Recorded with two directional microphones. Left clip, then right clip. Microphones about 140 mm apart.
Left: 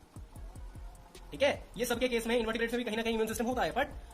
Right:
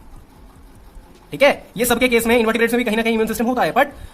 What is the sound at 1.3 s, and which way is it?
Speech, 35° right (ahead or behind).